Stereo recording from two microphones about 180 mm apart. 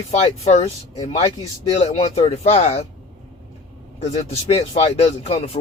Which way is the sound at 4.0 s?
35° left (ahead or behind).